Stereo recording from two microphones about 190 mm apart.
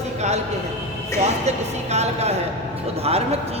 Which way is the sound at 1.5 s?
35° right (ahead or behind).